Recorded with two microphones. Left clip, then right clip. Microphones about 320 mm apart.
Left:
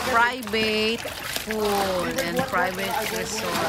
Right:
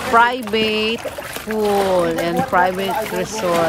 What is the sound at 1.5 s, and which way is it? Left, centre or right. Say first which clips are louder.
Speech: right 7 dB; centre.